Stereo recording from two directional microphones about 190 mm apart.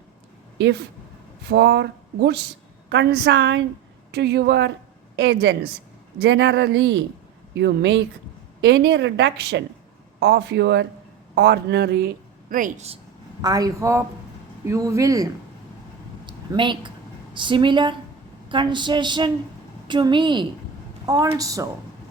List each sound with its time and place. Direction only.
1.5 s speech: 60° right (ahead or behind)
12.5 s speech: 45° right (ahead or behind)
13.4 s speech: 20° right (ahead or behind)
16.2 s a sound: 25° right (ahead or behind)
21.1 s speech: 20° right (ahead or behind)